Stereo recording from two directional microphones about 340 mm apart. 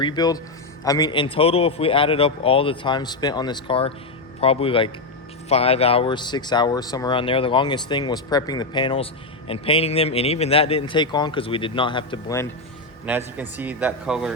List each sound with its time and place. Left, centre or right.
0.0 s speech: centre
13.1 s a man's voice: centre